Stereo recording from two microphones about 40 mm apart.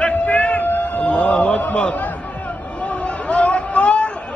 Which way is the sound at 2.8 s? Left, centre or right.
Left.